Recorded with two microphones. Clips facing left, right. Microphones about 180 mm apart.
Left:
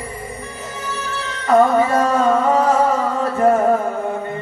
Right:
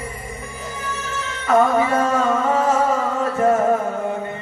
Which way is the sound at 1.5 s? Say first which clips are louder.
Left 3 dB; 35° left (ahead or behind).